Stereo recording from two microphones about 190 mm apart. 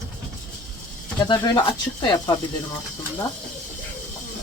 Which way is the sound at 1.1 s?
20° left (ahead or behind).